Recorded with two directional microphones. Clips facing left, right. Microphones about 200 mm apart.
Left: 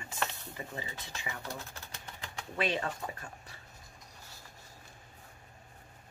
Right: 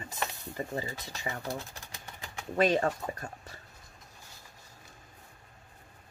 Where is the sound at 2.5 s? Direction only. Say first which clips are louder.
Right 7 dB; 45° right (ahead or behind).